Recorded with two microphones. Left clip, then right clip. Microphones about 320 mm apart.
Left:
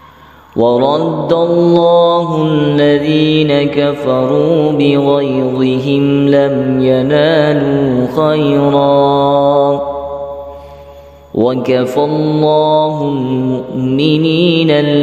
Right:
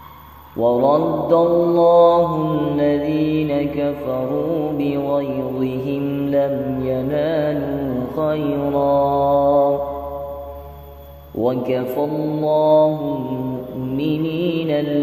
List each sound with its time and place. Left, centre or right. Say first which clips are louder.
0.6 s mantra: left 5 dB; left
11.3 s mantra: left 8 dB; left